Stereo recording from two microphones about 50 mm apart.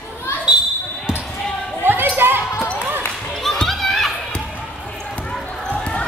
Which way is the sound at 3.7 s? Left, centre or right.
Centre.